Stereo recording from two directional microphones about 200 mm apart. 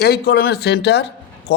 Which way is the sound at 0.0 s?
55° left (ahead or behind).